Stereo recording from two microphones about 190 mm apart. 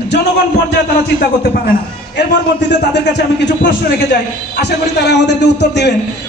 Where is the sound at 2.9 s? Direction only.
65° left (ahead or behind).